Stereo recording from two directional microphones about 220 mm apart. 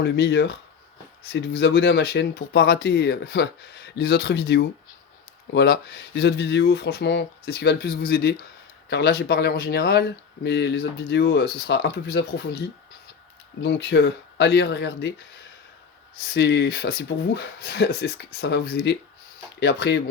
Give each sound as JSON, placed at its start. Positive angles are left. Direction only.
{"t": 0.0, "sound": "speech", "side_deg": 50}
{"t": 16.3, "sound": "speech", "side_deg": 50}